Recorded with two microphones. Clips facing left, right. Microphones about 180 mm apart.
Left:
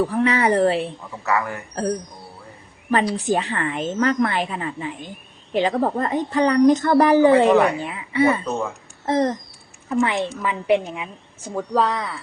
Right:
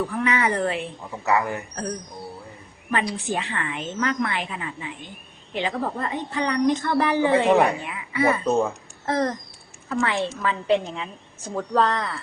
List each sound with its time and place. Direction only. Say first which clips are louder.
0.0 s a woman's voice: left 4 dB; 35° left (ahead or behind)
1.2 s a man's voice: right 1 dB; 20° right (ahead or behind)
2.9 s a woman's voice: left 6 dB; 35° left (ahead or behind)
9.0 s a sound: left 4 dB; 20° left (ahead or behind)
9.9 s a woman's voice: left 3 dB; 20° left (ahead or behind)